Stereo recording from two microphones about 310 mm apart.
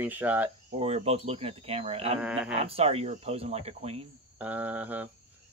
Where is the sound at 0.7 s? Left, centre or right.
Right.